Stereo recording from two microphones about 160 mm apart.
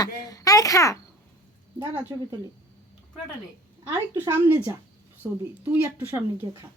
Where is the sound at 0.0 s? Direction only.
20° left (ahead or behind).